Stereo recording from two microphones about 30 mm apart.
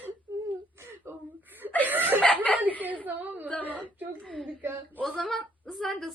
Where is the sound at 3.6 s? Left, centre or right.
Right.